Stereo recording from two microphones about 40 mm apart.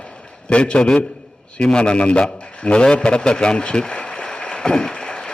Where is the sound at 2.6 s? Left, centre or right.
Left.